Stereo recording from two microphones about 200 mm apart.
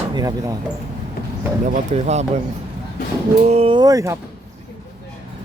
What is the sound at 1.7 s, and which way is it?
Speech, 35° right (ahead or behind).